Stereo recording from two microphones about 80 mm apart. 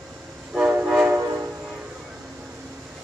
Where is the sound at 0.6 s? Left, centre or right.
Centre.